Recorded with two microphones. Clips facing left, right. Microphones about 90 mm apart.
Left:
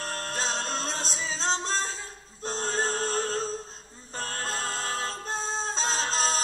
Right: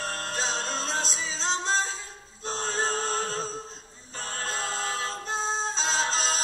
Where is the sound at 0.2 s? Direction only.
45° left (ahead or behind).